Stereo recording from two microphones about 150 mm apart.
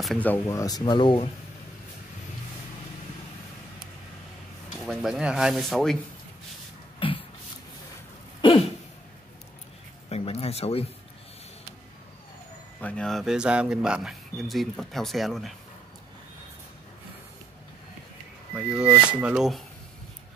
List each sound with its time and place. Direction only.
0.0 s speech: 5° left (ahead or behind); by 1.3 s 35° left (ahead or behind)
4.8 s speech: 5° right (ahead or behind)
7.0 s a sound: 35° left (ahead or behind)
8.4 s a sound: 35° left (ahead or behind)
10.0 s speech: 45° left (ahead or behind)
12.8 s speech: 5° left (ahead or behind)
18.5 s speech: 5° right (ahead or behind)